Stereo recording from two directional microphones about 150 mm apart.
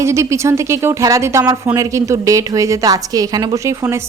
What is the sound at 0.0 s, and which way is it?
A woman's voice, 20° right (ahead or behind).